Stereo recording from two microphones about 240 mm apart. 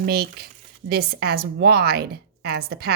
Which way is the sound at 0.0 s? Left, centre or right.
Right.